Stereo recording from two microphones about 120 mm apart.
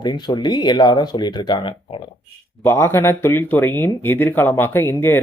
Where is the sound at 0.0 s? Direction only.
35° left (ahead or behind).